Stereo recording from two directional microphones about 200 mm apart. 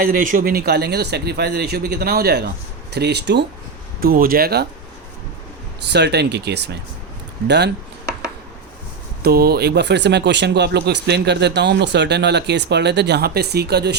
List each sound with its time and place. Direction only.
0.0 s a man's voice: 45° right (ahead or behind)
4.0 s a man's voice: 45° right (ahead or behind)
5.9 s speech: 55° right (ahead or behind)
9.2 s speech: 50° right (ahead or behind)